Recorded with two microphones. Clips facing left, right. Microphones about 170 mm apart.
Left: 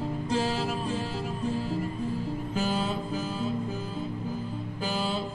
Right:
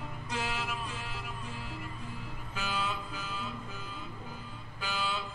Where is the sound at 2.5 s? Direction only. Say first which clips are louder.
Left 6 dB; 35° left (ahead or behind).